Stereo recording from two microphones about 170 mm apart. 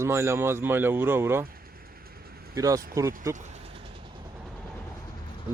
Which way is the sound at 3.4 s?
40° right (ahead or behind).